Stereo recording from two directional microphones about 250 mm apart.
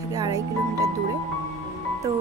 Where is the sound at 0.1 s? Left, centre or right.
Centre.